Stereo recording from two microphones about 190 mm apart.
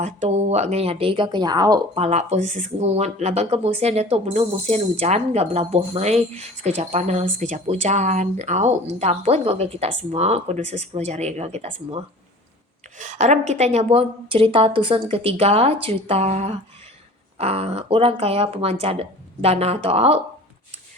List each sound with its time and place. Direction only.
0.0 s speech: 35° right (ahead or behind); by 1.8 s 20° right (ahead or behind)
2.0 s speech: 35° right (ahead or behind)